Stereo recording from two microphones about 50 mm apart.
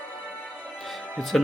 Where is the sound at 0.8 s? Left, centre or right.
Centre.